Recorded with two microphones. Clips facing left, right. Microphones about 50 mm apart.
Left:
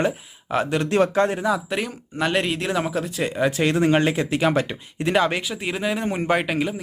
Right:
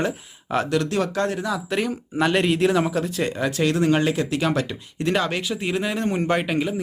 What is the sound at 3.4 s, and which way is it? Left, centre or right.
Speech, left.